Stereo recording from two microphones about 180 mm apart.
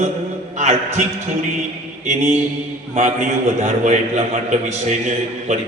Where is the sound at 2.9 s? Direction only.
40° right (ahead or behind).